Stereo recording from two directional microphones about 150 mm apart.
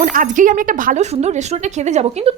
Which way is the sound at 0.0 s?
65° right (ahead or behind).